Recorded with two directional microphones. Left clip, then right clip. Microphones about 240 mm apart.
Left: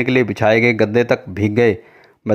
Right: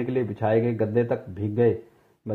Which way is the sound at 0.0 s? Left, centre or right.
Left.